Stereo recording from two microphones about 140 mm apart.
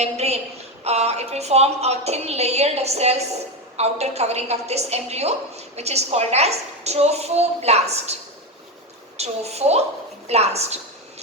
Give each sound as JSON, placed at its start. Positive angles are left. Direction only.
{"t": 0.0, "sound": "a sound", "side_deg": -50}
{"t": 0.9, "sound": "a woman's voice", "side_deg": -50}
{"t": 9.1, "sound": "a woman's voice", "side_deg": -50}